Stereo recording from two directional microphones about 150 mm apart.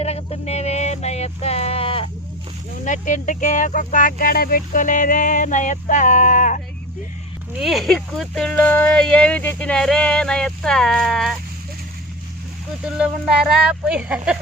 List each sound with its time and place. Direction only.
0.0 s music: 45° left (ahead or behind)
2.8 s speech: 55° left (ahead or behind)
7.6 s speech: centre (ahead or behind)
13.0 s speech: 5° right (ahead or behind)